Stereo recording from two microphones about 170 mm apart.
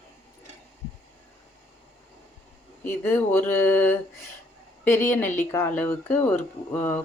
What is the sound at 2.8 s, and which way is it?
Speech, 10° left (ahead or behind).